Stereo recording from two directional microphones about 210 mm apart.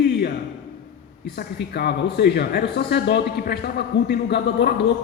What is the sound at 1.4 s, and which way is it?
Speech, 50° left (ahead or behind).